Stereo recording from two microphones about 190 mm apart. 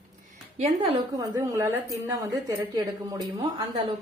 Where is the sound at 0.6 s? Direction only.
35° right (ahead or behind).